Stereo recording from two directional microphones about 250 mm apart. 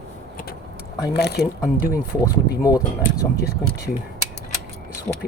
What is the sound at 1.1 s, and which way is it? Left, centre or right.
Speech, left.